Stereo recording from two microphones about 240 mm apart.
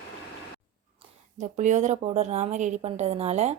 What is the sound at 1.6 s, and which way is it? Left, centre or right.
A woman's voice, right.